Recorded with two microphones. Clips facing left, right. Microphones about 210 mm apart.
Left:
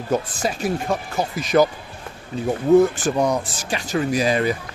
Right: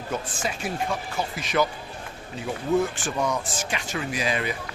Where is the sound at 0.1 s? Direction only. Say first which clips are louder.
Left 8 dB; 40° left (ahead or behind).